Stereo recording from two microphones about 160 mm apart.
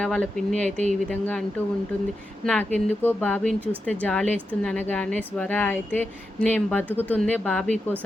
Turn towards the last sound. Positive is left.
turn(degrees=5)  # may be behind; listen again after turning